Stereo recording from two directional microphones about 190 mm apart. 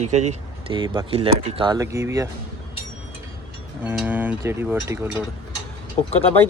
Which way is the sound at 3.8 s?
5° right (ahead or behind).